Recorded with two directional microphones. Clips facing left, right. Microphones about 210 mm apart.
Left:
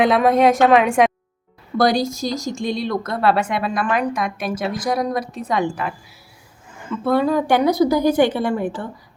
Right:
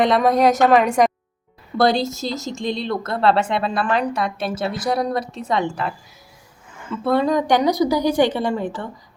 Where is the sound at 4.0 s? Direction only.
10° left (ahead or behind).